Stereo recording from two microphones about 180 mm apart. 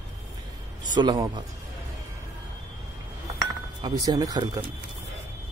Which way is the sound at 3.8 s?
20° right (ahead or behind).